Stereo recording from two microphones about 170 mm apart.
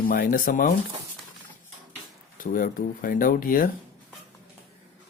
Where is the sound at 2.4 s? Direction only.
55° left (ahead or behind).